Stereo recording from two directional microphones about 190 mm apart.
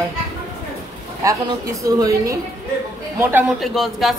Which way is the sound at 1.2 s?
15° right (ahead or behind).